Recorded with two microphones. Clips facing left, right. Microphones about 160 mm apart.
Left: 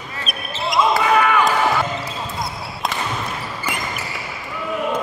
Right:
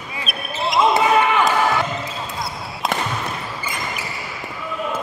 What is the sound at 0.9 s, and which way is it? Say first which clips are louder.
Basketball bounce: even; 25° right (ahead or behind).